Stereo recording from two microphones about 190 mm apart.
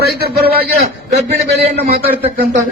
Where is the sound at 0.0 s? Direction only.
55° right (ahead or behind).